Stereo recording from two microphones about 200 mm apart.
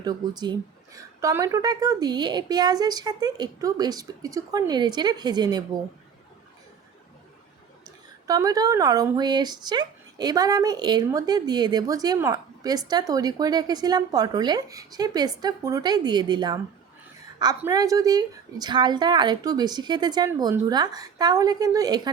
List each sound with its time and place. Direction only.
0.0 s speech: 20° right (ahead or behind)
7.9 s speech: 20° right (ahead or behind)
17.6 s speech: 15° right (ahead or behind)